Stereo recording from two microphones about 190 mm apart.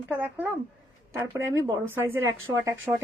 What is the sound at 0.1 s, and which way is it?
Speech, 10° right (ahead or behind).